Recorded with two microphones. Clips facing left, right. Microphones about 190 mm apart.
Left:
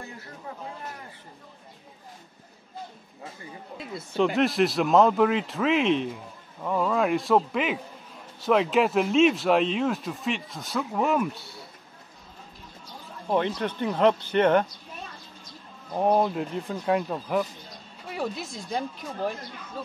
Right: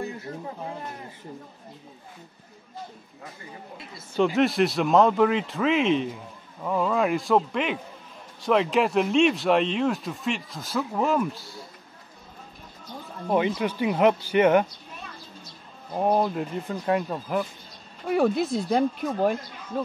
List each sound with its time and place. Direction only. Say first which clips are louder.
4.1 s a man's voice: right 1 dB; centre (ahead or behind)
13.3 s speech: right 2 dB; 10° right (ahead or behind)
16.0 s a man's voice: even; centre (ahead or behind)
18.0 s speech: right 10 dB; 55° right (ahead or behind)